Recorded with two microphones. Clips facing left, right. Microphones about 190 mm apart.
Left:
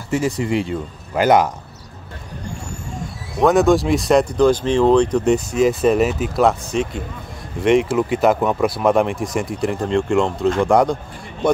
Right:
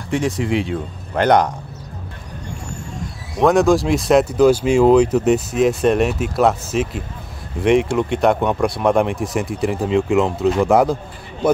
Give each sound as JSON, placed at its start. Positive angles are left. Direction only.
{"t": 0.1, "sound": "speech", "side_deg": 0}
{"t": 3.3, "sound": "speech", "side_deg": 0}